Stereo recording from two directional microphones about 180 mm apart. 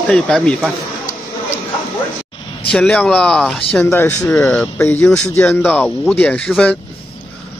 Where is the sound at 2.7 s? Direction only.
5° left (ahead or behind).